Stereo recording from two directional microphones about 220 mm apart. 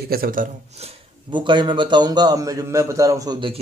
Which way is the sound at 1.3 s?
20° right (ahead or behind).